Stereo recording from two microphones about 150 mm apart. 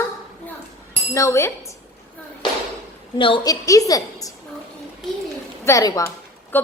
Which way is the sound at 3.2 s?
35° left (ahead or behind).